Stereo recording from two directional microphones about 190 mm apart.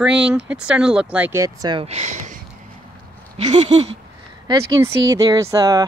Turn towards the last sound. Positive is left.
turn(degrees=-20)  # may be behind; listen again after turning